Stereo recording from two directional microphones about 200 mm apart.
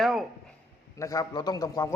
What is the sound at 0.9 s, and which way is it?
A man's voice, 15° left (ahead or behind).